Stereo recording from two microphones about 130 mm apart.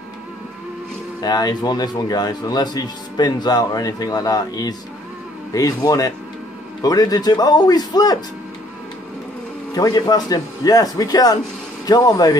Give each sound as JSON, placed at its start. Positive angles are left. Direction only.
{"t": 1.2, "sound": "speech", "side_deg": 30}
{"t": 9.8, "sound": "speech", "side_deg": 30}